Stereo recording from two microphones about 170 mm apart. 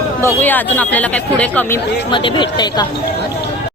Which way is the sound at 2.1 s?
30° left (ahead or behind).